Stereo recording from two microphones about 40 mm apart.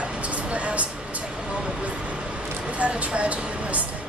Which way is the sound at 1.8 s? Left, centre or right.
Right.